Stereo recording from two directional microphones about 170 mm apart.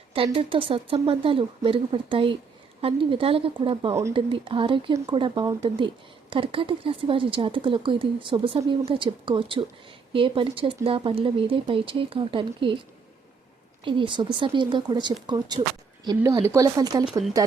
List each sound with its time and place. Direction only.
0.1 s speech: 30° right (ahead or behind)
13.8 s speech: 30° right (ahead or behind)